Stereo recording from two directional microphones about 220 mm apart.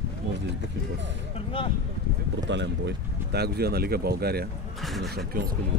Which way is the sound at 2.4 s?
50° right (ahead or behind).